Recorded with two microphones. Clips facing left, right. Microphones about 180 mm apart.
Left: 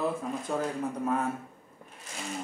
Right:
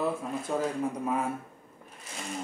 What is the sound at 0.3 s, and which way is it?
Speech, 5° right (ahead or behind).